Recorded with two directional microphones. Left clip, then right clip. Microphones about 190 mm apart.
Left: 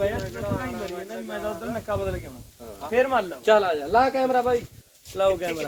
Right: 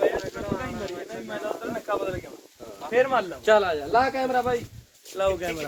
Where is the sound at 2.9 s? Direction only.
35° right (ahead or behind).